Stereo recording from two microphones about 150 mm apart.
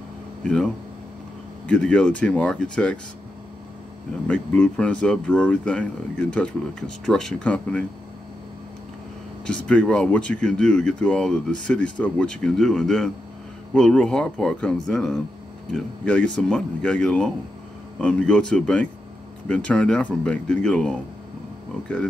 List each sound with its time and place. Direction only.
1.7 s speech: 5° left (ahead or behind)
4.3 s speech: 5° left (ahead or behind)
9.5 s speech: 5° left (ahead or behind)